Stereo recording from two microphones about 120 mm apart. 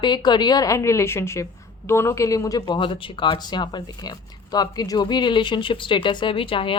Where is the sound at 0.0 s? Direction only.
35° left (ahead or behind).